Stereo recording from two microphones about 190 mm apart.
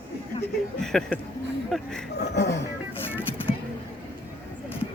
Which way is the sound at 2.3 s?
60° left (ahead or behind).